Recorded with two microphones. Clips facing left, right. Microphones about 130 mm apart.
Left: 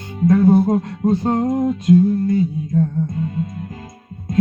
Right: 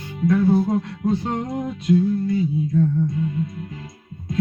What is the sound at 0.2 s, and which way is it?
Music, 45° left (ahead or behind).